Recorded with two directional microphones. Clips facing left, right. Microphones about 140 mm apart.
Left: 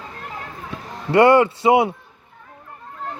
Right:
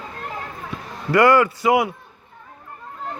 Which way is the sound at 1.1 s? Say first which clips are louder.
Left 2 dB; 25° left (ahead or behind).